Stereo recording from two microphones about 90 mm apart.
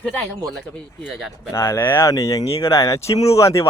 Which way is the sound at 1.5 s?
30° left (ahead or behind).